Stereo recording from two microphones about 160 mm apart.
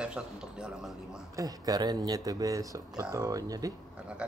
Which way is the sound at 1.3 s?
20° right (ahead or behind).